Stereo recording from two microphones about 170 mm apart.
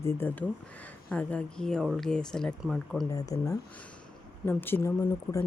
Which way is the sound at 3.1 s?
20° left (ahead or behind).